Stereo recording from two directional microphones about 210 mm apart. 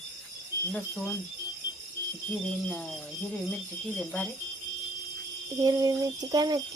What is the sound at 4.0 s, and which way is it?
Speech, 5° left (ahead or behind).